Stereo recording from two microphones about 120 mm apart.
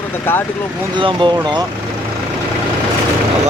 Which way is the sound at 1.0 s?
45° right (ahead or behind).